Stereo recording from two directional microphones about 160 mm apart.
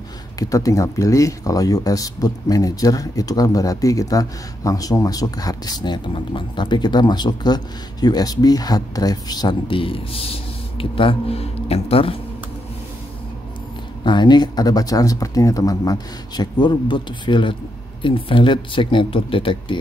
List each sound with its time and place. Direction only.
0.4 s speech: 20° left (ahead or behind); by 12.2 s 35° left (ahead or behind)
14.0 s speech: 30° left (ahead or behind)